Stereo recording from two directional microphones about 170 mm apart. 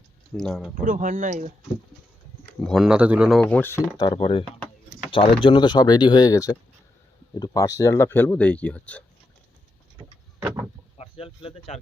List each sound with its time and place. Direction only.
0.3 s speech: centre (ahead or behind)
0.8 s speech: 50° right (ahead or behind)
2.6 s speech: centre (ahead or behind)
10.4 s vehicle: 20° right (ahead or behind)
10.9 s speech: 35° left (ahead or behind)